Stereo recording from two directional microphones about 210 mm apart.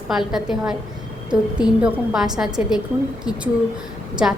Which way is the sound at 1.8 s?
Centre (ahead or behind).